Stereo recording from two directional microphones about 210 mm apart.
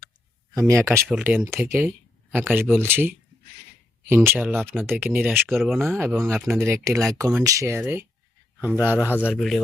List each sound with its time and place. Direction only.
0.7 s speech: 15° right (ahead or behind)
5.9 s speech: 10° right (ahead or behind)
6.4 s speech: centre (ahead or behind)
6.7 s speech: 15° right (ahead or behind)